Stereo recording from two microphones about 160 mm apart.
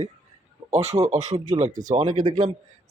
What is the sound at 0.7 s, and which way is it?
Speech, 40° right (ahead or behind).